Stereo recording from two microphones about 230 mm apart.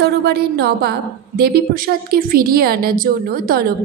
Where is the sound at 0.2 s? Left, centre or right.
Right.